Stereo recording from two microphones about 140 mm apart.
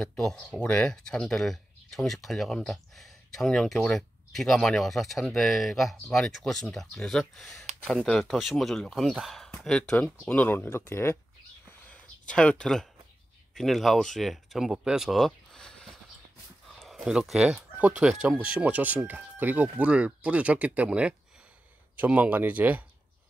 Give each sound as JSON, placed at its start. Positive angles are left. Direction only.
{"t": 0.0, "sound": "speech", "side_deg": 5}
{"t": 11.9, "sound": "a sound", "side_deg": 10}
{"t": 13.6, "sound": "speech", "side_deg": 0}